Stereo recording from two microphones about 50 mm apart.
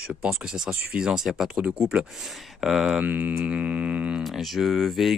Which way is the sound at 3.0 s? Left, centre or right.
Right.